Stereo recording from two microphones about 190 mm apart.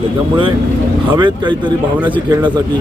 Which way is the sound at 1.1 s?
25° right (ahead or behind).